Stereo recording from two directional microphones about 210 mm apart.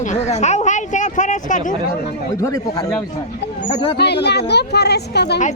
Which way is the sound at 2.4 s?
15° left (ahead or behind).